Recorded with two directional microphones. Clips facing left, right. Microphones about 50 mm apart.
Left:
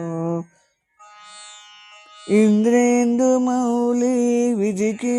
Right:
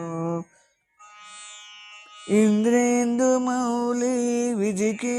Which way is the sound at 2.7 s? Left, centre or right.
Left.